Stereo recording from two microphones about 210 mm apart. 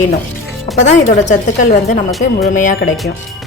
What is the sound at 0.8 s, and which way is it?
Speech, 35° left (ahead or behind).